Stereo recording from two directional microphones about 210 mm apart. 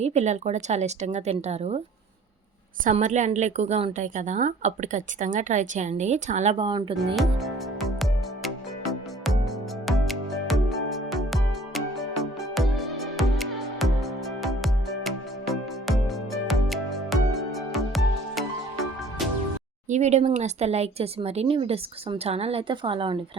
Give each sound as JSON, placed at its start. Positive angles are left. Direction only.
{"t": 0.0, "sound": "a woman's voice", "side_deg": -30}
{"t": 2.8, "sound": "a woman's voice", "side_deg": -35}
{"t": 7.2, "sound": "music", "side_deg": 0}
{"t": 19.9, "sound": "speech", "side_deg": -30}